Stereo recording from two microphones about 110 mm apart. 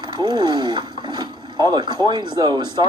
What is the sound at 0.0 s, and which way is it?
Speech, 40° right (ahead or behind).